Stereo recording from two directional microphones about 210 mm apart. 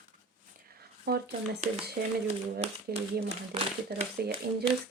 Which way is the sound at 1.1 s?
45° right (ahead or behind).